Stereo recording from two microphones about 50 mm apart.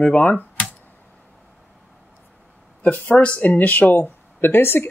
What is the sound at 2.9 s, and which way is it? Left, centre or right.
Speech, left.